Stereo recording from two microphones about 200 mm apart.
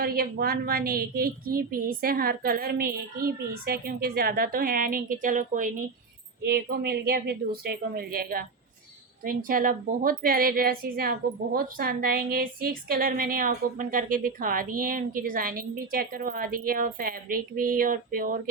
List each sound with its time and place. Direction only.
0.0 s a woman's voice: 50° right (ahead or behind)
6.4 s a woman's voice: 50° right (ahead or behind)